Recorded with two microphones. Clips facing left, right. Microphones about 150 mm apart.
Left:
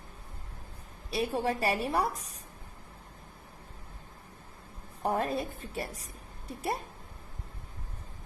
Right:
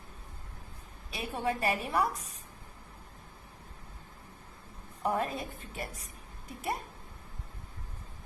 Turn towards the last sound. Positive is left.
turn(degrees=35)  # may be behind; listen again after turning